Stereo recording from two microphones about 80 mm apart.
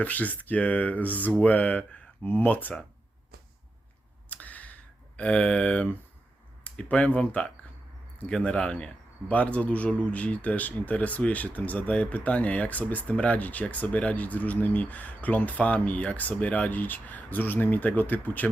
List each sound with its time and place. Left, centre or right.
0.0 s speech: left
4.3 s a sound: centre
6.7 s speech: centre